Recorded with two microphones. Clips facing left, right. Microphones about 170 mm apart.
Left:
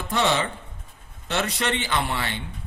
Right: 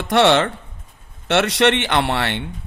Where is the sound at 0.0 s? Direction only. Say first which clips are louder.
Right 8 dB; 75° right (ahead or behind).